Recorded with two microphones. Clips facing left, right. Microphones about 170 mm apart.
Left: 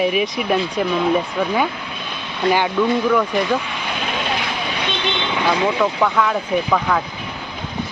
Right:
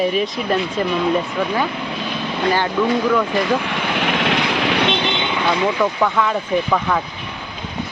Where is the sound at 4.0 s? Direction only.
70° right (ahead or behind).